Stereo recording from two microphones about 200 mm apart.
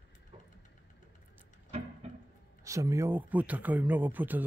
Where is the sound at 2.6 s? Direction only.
15° right (ahead or behind).